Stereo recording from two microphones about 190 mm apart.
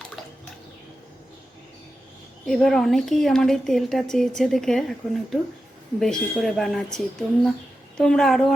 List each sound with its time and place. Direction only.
2.5 s speech: centre (ahead or behind)